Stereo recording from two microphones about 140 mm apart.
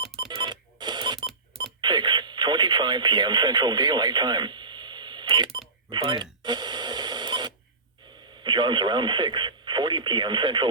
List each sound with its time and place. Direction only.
0.3 s cash register: 30° right (ahead or behind)
1.6 s radio: 30° right (ahead or behind)
8.4 s speech: 35° right (ahead or behind)